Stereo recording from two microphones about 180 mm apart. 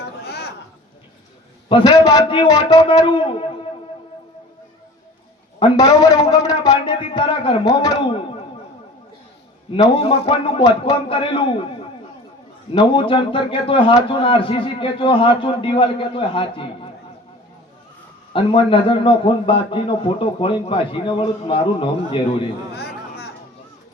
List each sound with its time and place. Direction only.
0.0 s a sound: 65° left (ahead or behind)
1.7 s a man's voice: 20° left (ahead or behind)
5.5 s a man's voice: 25° left (ahead or behind)
9.7 s a man's voice: 30° left (ahead or behind)
12.7 s a man's voice: 30° left (ahead or behind)
18.3 s a man's voice: 30° left (ahead or behind)
22.7 s music: 65° left (ahead or behind)